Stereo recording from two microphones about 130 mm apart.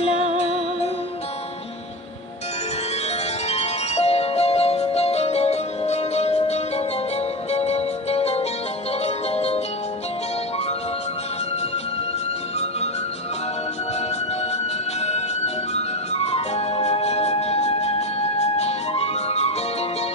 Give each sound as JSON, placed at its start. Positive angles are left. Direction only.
{"t": 0.0, "sound": "music", "side_deg": 50}
{"t": 3.4, "sound": "music", "side_deg": 55}
{"t": 15.0, "sound": "music", "side_deg": 55}